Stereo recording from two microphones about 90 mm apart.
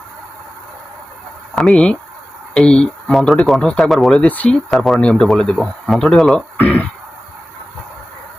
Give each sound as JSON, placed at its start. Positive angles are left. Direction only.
{"t": 1.5, "sound": "speech", "side_deg": 5}
{"t": 4.2, "sound": "speech", "side_deg": 15}
{"t": 4.7, "sound": "speech", "side_deg": 5}
{"t": 6.3, "sound": "speech", "side_deg": 20}